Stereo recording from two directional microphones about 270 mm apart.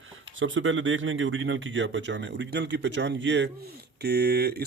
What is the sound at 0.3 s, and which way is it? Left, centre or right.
Speech, right.